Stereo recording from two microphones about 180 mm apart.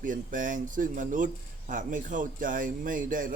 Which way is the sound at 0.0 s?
45° right (ahead or behind).